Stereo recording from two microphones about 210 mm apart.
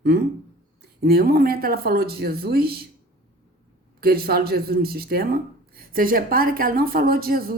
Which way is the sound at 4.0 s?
45° right (ahead or behind).